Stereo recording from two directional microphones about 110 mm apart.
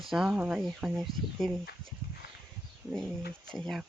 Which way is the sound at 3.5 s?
Centre (ahead or behind).